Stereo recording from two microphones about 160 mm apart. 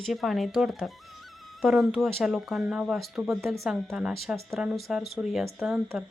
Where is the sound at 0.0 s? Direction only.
Centre (ahead or behind).